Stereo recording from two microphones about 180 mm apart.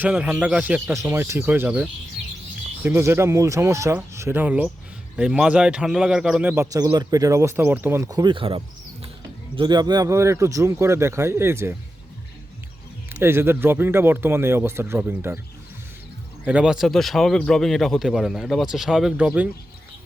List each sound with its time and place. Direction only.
0.0 s a man's voice: 5° right (ahead or behind)
6.7 s speech: 20° right (ahead or behind)
13.1 s speech: 15° right (ahead or behind)
16.5 s a man's voice: 5° right (ahead or behind)